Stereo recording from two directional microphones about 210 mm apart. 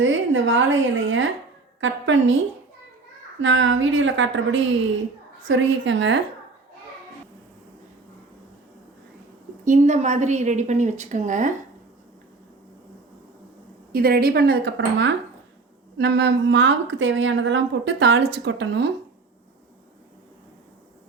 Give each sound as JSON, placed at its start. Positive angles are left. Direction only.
{"t": 0.0, "sound": "a woman's voice", "side_deg": -65}
{"t": 3.4, "sound": "a woman's voice", "side_deg": -65}
{"t": 9.6, "sound": "a woman's voice", "side_deg": -35}
{"t": 13.9, "sound": "a woman's voice", "side_deg": -45}